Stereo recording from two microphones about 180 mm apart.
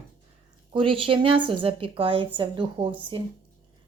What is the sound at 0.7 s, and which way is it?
A woman's voice, 30° right (ahead or behind).